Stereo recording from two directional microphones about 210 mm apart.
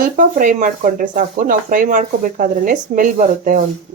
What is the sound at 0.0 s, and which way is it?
Speech, 40° right (ahead or behind).